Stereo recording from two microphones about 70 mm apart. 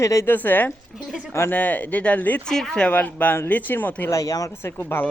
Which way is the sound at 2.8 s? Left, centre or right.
Left.